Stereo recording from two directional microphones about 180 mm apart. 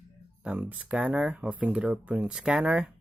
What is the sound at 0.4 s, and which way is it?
Speech, 10° right (ahead or behind).